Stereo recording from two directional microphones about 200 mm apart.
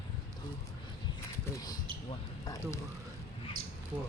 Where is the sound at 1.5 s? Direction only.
20° left (ahead or behind).